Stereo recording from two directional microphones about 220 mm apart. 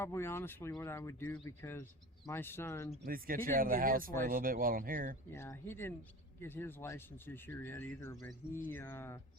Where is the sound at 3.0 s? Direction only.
40° right (ahead or behind).